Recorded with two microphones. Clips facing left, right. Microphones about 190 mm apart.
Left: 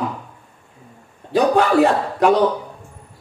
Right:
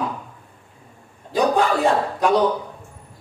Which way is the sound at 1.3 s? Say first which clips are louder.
Left 4 dB; 65° left (ahead or behind).